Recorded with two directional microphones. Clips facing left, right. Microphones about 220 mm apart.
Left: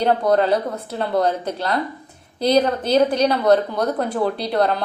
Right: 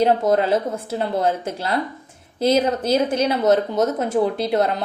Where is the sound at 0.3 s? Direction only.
25° right (ahead or behind).